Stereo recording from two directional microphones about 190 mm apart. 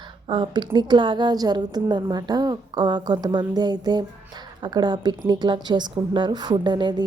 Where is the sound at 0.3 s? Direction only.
25° right (ahead or behind).